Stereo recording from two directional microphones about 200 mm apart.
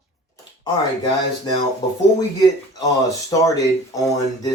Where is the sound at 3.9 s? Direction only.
15° left (ahead or behind).